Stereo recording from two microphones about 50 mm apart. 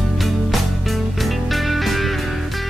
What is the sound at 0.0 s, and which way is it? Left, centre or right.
Music, centre.